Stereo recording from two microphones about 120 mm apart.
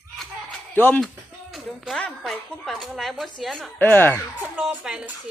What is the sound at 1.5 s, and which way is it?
A woman's voice, centre (ahead or behind).